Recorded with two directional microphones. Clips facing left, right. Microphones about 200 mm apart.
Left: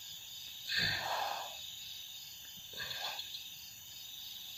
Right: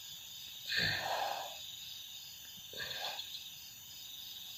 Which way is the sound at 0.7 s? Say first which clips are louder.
Right 1 dB; 25° right (ahead or behind).